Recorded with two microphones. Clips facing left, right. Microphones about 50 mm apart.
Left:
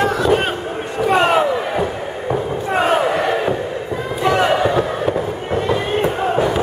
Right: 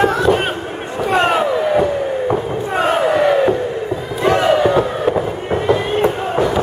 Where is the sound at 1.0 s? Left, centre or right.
Centre.